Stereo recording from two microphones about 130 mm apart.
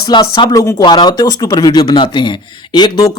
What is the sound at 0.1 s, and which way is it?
Speech, 35° left (ahead or behind).